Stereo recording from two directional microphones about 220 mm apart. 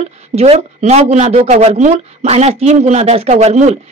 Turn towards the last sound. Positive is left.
turn(degrees=-30)  # may be behind; listen again after turning